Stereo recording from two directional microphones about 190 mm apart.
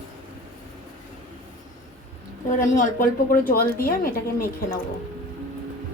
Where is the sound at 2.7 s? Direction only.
45° left (ahead or behind).